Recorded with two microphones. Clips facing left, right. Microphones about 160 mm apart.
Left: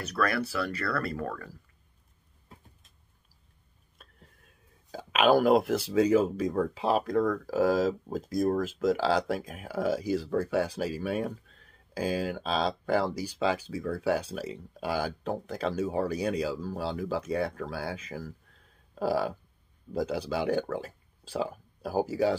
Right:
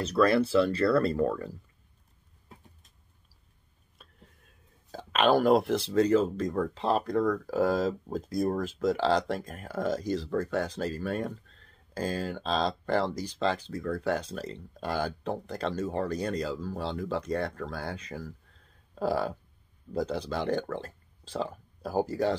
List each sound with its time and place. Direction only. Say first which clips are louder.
0.0 s speech: right 6 dB; 25° right (ahead or behind)
4.0 s a sound: even; centre (ahead or behind)
4.9 s speech: left 1 dB; 5° left (ahead or behind)